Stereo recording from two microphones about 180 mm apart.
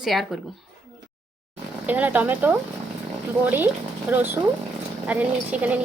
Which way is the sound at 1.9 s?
10° right (ahead or behind).